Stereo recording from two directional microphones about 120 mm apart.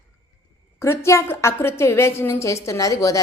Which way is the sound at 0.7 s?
25° left (ahead or behind).